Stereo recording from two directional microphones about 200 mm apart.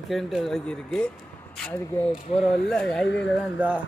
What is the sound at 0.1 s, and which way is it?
Speech, centre (ahead or behind).